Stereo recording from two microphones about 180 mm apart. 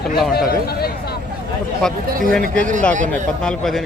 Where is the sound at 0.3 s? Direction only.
60° left (ahead or behind).